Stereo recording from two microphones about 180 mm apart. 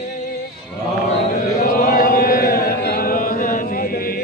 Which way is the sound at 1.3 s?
50° left (ahead or behind).